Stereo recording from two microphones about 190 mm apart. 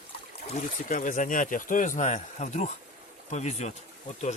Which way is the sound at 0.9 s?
45° left (ahead or behind).